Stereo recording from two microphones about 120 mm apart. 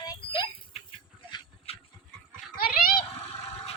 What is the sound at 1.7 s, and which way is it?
Dog, 55° left (ahead or behind).